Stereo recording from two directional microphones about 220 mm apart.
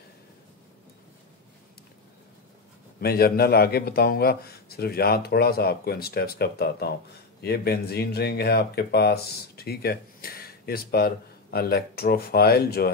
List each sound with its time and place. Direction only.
3.0 s speech: 45° left (ahead or behind)